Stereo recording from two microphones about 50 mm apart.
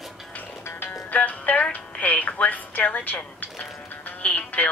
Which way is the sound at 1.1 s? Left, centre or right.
Left.